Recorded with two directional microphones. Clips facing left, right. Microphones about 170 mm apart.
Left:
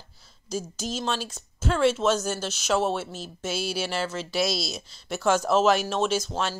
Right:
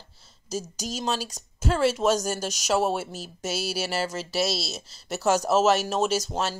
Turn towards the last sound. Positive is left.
turn(degrees=-5)  # may be behind; listen again after turning